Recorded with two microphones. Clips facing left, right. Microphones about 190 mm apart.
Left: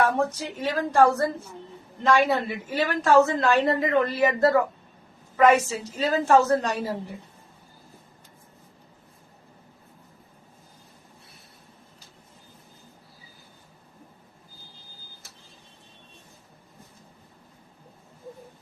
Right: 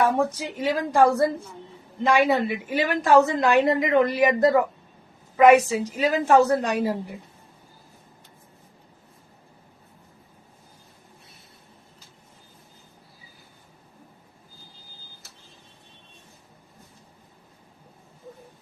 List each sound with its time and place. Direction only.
0.0 s a woman's voice: 10° right (ahead or behind)